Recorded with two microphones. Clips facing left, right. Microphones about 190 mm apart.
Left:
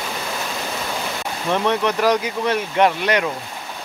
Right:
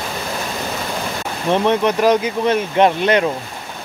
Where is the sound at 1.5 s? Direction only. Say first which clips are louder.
Right 4 dB; 20° right (ahead or behind).